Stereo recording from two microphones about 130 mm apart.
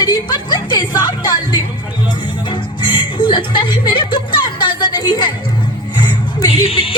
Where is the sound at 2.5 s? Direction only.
35° left (ahead or behind).